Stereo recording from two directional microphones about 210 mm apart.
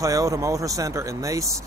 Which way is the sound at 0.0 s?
15° right (ahead or behind).